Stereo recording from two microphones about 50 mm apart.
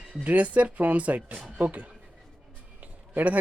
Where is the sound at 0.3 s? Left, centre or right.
Right.